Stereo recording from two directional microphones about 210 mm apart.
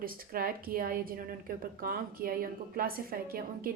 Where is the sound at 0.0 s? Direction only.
45° right (ahead or behind).